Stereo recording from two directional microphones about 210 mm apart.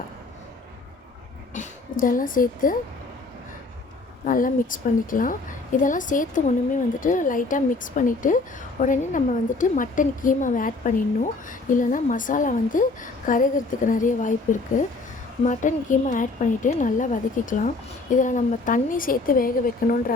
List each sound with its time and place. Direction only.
1.5 s speech: 40° left (ahead or behind)
4.3 s a woman's voice: 40° left (ahead or behind)